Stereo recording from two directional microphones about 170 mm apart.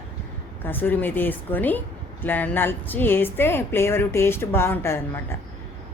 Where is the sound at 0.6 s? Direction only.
10° left (ahead or behind).